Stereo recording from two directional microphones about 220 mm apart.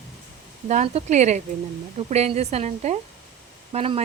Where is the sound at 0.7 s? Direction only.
30° right (ahead or behind).